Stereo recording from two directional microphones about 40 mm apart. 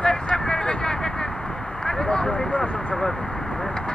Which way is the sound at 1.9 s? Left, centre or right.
Centre.